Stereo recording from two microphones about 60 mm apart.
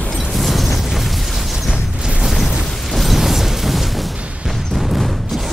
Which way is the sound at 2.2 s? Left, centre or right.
Centre.